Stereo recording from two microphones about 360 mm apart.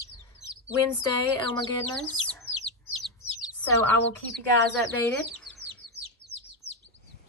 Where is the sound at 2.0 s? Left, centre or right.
Centre.